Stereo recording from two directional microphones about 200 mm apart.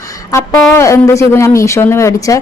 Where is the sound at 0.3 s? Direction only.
15° left (ahead or behind).